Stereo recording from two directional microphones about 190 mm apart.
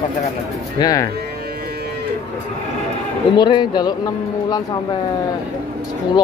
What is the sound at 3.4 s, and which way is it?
Speech, 25° left (ahead or behind).